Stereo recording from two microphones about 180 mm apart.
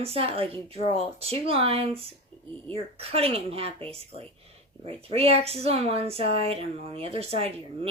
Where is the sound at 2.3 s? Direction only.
30° right (ahead or behind).